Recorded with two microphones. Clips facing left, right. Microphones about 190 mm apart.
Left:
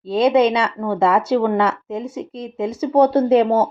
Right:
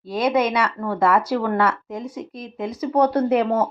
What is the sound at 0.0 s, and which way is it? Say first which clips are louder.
Speech: left 5 dB; 25° left (ahead or behind).